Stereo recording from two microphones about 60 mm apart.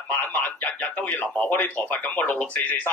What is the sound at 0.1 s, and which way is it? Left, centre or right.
A man's voice, left.